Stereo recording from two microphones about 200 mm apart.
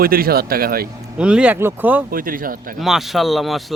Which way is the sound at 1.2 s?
5° right (ahead or behind).